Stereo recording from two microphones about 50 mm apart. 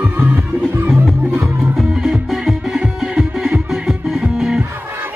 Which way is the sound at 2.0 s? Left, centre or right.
Centre.